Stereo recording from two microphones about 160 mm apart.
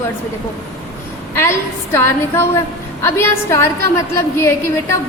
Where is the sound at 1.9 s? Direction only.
15° left (ahead or behind).